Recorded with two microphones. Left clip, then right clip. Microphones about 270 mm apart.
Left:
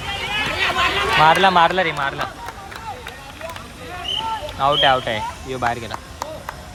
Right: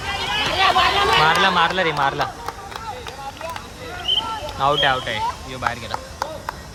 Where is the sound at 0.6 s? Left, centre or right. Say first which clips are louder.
Right 4 dB; right.